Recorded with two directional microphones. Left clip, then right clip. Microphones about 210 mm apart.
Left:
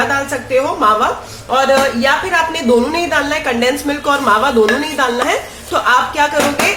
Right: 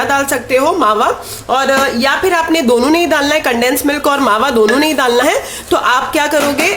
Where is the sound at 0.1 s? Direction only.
50° right (ahead or behind).